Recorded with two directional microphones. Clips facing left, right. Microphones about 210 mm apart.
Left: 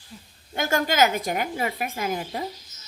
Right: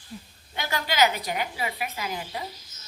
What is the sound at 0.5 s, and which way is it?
A woman's voice, 45° left (ahead or behind).